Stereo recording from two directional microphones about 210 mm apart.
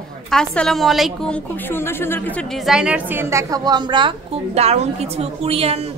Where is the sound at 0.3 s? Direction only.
5° left (ahead or behind).